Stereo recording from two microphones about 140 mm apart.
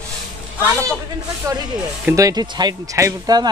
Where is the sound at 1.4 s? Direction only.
25° right (ahead or behind).